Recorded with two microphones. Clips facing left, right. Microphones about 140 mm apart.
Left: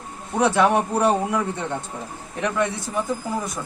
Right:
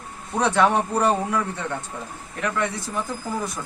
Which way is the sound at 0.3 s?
10° left (ahead or behind).